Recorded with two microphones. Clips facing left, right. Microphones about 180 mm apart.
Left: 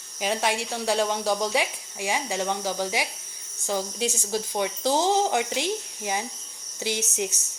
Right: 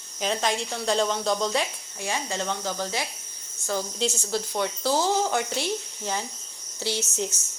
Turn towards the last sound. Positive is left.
turn(degrees=15)  # may be behind; listen again after turning